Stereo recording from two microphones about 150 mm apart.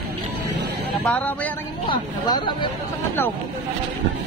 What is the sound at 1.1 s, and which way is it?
Speech, 10° left (ahead or behind).